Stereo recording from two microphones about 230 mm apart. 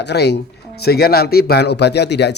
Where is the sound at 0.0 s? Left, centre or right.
Left.